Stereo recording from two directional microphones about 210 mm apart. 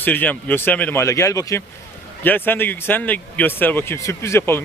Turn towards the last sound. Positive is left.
turn(degrees=15)  # may be behind; listen again after turning